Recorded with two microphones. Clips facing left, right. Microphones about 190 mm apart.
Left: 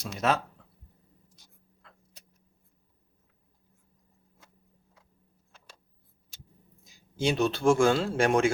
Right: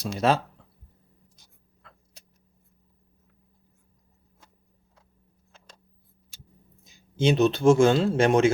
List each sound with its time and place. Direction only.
0.0 s speech: 30° right (ahead or behind)
6.8 s a man's voice: 20° right (ahead or behind)